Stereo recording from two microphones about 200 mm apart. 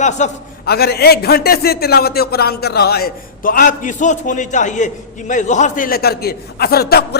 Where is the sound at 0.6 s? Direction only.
50° left (ahead or behind).